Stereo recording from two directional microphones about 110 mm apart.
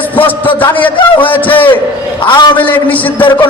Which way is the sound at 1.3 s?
15° left (ahead or behind).